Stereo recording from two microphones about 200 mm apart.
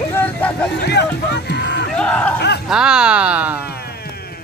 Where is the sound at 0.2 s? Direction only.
5° left (ahead or behind).